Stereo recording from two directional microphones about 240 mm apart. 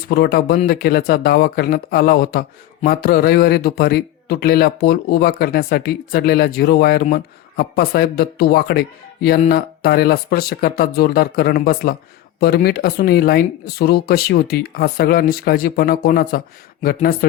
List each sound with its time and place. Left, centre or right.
0.1 s speech: left